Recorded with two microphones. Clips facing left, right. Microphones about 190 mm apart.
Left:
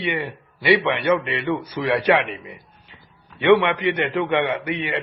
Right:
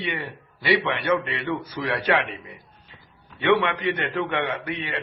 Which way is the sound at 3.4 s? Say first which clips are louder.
Left 5 dB; 15° left (ahead or behind).